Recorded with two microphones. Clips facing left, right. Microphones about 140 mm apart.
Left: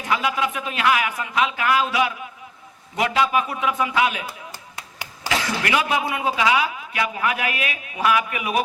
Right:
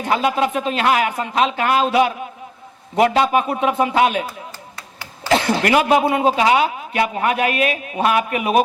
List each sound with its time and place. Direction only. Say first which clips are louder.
0.0 s a man's voice: right 5 dB; 35° right (ahead or behind)
5.3 s a man's voice: right 7 dB; 35° right (ahead or behind)